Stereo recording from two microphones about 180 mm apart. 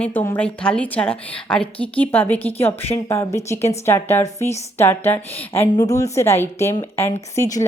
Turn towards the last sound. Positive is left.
turn(degrees=20)  # may be behind; listen again after turning